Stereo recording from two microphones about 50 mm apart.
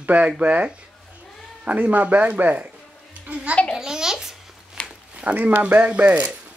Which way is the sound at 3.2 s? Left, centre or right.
Right.